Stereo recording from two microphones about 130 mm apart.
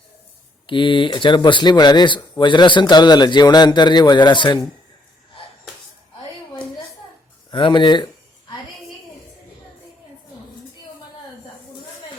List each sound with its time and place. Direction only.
0.7 s speech: 40° left (ahead or behind)
7.5 s speech: 40° left (ahead or behind)